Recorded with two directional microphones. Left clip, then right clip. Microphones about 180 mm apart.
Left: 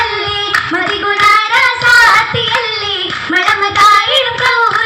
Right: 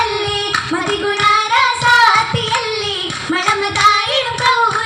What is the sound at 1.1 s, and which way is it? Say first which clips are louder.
Singing: left 4 dB; 40° right (ahead or behind).